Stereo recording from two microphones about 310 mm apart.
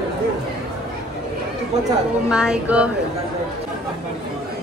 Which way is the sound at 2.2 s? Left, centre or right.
Centre.